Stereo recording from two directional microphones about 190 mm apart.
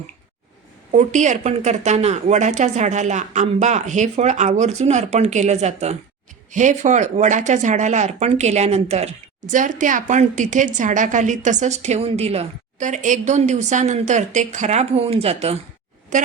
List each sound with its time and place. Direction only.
0.9 s speech: 40° right (ahead or behind)